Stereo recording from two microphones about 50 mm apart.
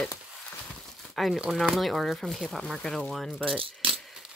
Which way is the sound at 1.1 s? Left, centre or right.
Centre.